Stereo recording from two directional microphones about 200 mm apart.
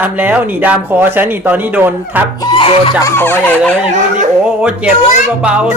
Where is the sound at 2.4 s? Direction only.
25° left (ahead or behind).